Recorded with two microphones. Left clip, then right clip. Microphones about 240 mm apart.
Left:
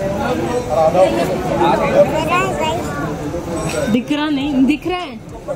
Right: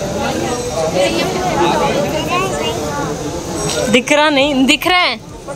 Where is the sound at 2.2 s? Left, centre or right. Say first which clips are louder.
Even; centre.